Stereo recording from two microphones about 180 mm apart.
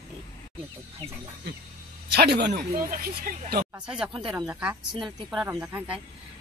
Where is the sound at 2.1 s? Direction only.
65° right (ahead or behind).